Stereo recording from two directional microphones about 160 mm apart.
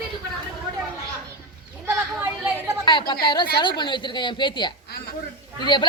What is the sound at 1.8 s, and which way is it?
Chatter, 15° right (ahead or behind).